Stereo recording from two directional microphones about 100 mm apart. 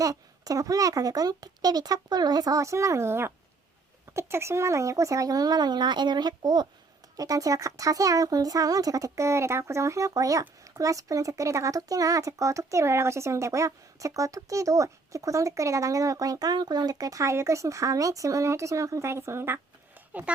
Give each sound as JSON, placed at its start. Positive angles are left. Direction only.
{"t": 0.0, "sound": "speech", "side_deg": -35}